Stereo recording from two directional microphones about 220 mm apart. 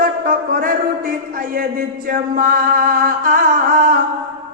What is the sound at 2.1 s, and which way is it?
Music, 40° right (ahead or behind).